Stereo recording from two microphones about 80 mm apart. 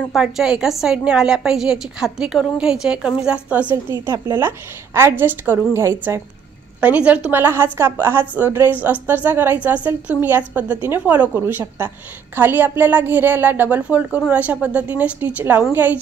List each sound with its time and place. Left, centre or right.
0.1 s a woman's voice: centre
4.0 s a woman's voice: right
6.8 s a woman's voice: centre
7.2 s a woman's voice: right